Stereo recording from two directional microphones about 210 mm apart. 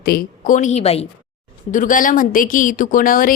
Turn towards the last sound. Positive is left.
turn(degrees=40)  # may be behind; listen again after turning